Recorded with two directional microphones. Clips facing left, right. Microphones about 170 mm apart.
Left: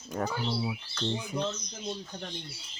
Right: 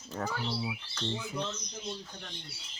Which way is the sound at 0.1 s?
15° left (ahead or behind).